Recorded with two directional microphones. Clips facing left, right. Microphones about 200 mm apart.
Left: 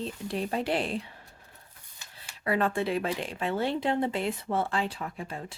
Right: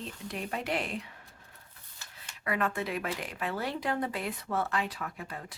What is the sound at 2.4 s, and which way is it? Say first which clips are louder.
Speech: left 5 dB; 30° left (ahead or behind).